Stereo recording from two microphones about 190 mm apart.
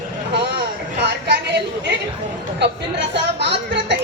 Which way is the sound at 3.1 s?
65° right (ahead or behind).